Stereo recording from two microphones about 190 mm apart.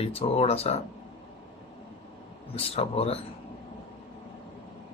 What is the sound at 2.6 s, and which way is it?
Speech, 30° left (ahead or behind).